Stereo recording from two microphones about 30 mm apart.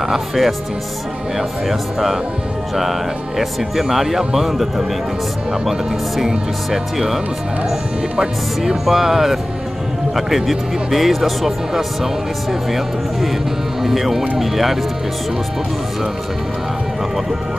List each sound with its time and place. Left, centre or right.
0.0 s speech: centre
1.7 s speech: centre
3.3 s speech: centre
6.2 s speech: centre
8.8 s speech: centre